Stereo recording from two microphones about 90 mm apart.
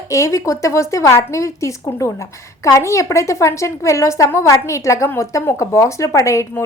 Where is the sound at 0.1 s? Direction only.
35° left (ahead or behind).